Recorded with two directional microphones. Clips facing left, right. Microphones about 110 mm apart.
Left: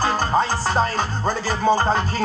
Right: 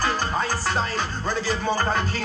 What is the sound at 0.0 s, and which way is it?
Music, 30° left (ahead or behind).